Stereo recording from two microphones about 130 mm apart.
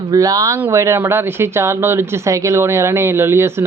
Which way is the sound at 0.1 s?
30° right (ahead or behind).